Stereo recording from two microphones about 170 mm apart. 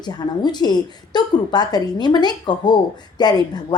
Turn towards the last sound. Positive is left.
turn(degrees=25)  # may be behind; listen again after turning